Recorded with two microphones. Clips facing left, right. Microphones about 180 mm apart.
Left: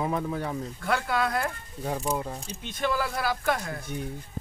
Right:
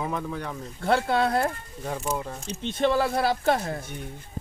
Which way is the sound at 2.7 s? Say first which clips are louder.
Right 6 dB; 30° right (ahead or behind).